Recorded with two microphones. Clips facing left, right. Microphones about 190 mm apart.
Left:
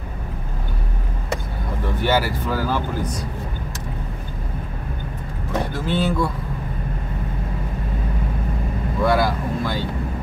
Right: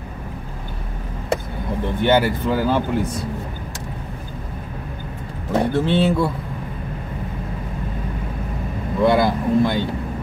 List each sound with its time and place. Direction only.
2.0 s speech: 20° right (ahead or behind)
5.5 s speech: 30° right (ahead or behind)
9.0 s speech: 20° right (ahead or behind)